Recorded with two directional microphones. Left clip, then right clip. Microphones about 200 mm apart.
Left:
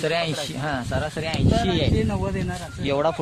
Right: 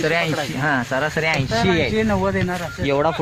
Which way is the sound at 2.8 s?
50° left (ahead or behind).